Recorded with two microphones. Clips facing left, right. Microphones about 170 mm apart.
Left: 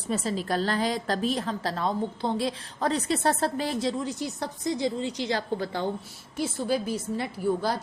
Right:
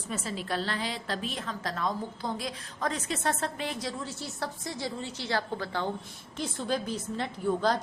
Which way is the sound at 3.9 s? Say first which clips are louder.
Left 7 dB; 15° left (ahead or behind).